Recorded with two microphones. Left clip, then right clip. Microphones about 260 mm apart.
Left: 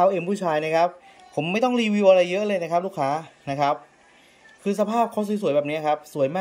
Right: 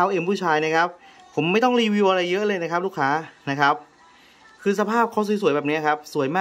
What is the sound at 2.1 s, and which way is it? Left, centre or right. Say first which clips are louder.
Speech: left 3 dB; centre.